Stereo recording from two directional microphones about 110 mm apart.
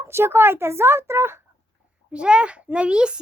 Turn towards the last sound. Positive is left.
turn(degrees=-10)  # may be behind; listen again after turning